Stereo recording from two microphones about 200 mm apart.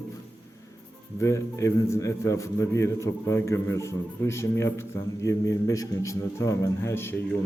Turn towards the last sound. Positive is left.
turn(degrees=10)  # may be behind; listen again after turning